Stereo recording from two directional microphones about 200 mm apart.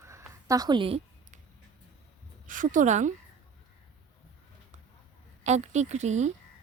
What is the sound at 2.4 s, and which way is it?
Speech, 40° right (ahead or behind).